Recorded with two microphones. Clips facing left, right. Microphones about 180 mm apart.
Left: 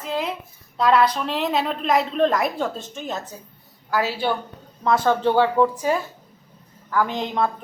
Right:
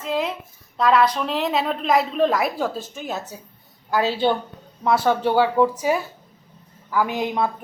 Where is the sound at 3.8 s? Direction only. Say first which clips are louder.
Right 3 dB; 20° right (ahead or behind).